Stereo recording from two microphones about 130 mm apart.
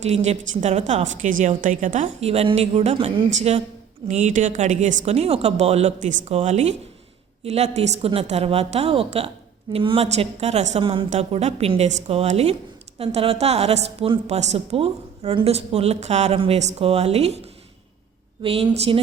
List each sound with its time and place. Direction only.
0.0 s a woman's voice: 60° right (ahead or behind)
3.2 s a woman's voice: 60° right (ahead or behind)
6.3 s a woman's voice: 60° right (ahead or behind)
18.4 s a woman's voice: 50° right (ahead or behind)